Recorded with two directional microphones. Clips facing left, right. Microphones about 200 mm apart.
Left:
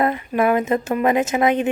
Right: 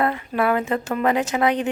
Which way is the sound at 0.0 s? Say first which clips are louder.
Left 3 dB; 15° left (ahead or behind).